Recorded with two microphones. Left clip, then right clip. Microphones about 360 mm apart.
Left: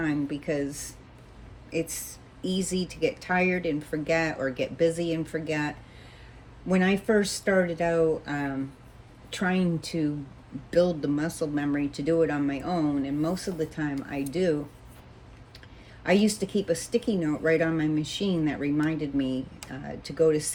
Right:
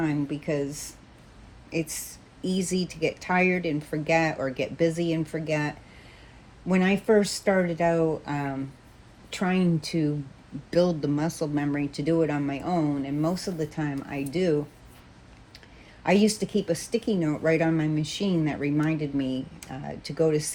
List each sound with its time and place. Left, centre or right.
0.0 s speech: centre
6.7 s speech: centre
16.0 s speech: centre